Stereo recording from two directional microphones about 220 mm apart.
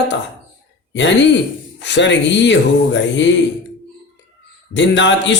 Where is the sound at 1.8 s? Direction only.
55° left (ahead or behind).